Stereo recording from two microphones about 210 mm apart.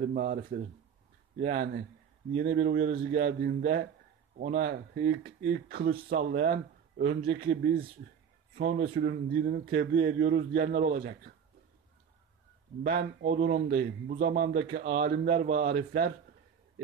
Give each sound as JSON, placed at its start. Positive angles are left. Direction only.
{"t": 0.0, "sound": "speech", "side_deg": -40}
{"t": 12.8, "sound": "speech", "side_deg": -45}